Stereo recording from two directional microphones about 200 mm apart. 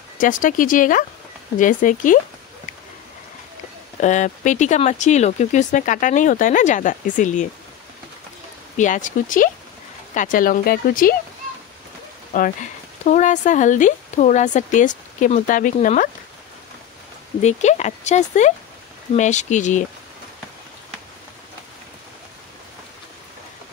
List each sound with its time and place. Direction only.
0.2 s speech: 40° left (ahead or behind)
4.0 s speech: 40° left (ahead or behind)
8.7 s speech: 40° left (ahead or behind)
12.3 s speech: 40° left (ahead or behind)
17.4 s speech: 35° left (ahead or behind)